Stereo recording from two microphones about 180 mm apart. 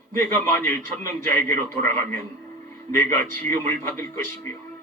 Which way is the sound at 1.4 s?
15° left (ahead or behind).